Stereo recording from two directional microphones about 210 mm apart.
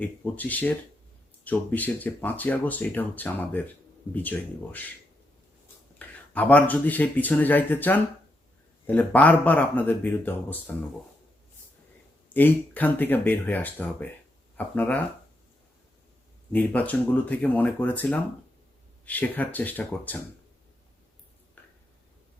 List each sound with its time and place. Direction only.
0.0 s speech: 5° left (ahead or behind)
6.0 s speech: 5° left (ahead or behind)
12.3 s speech: 10° left (ahead or behind)
16.5 s speech: 5° left (ahead or behind)